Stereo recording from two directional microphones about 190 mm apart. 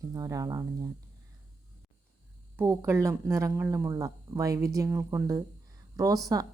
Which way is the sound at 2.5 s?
15° right (ahead or behind).